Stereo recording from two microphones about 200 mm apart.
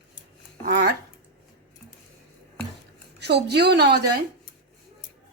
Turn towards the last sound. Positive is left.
turn(degrees=-55)  # may be behind; listen again after turning